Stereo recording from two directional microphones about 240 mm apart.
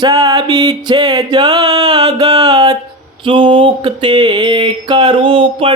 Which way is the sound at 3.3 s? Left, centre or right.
Right.